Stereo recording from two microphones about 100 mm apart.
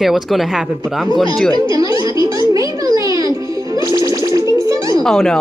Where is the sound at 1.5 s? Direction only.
40° right (ahead or behind).